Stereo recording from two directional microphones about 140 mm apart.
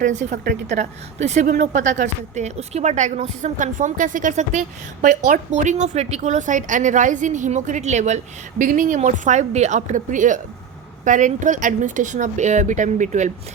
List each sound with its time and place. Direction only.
0.0 s a woman's voice: 60° right (ahead or behind)